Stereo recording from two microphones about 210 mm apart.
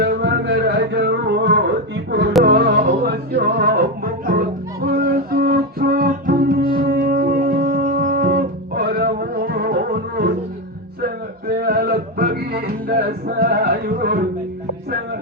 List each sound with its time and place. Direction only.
0.0 s music: 55° right (ahead or behind)